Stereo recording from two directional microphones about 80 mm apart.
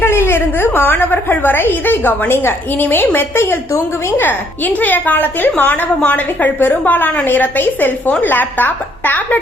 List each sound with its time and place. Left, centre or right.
0.0 s a woman's voice: left